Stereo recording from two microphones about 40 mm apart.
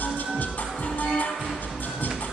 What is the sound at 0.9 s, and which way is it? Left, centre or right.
Music, left.